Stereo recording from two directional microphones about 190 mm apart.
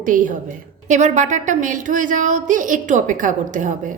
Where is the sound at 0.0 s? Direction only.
45° right (ahead or behind).